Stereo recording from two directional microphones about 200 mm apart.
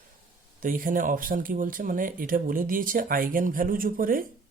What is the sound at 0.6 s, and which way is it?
Speech, 45° right (ahead or behind).